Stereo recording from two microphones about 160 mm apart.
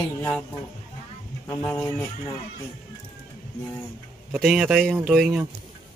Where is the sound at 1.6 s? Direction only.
5° left (ahead or behind).